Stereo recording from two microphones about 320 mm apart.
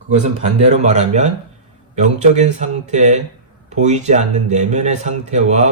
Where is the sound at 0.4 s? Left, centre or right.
Right.